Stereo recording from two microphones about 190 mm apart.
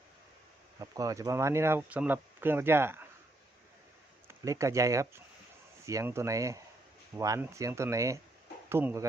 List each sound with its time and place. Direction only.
0.8 s speech: 20° right (ahead or behind)
4.3 s speech: 15° right (ahead or behind)